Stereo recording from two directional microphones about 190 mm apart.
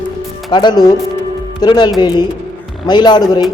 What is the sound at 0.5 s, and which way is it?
A man's voice, 20° left (ahead or behind).